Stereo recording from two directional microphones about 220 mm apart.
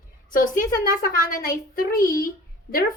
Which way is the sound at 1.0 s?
40° left (ahead or behind).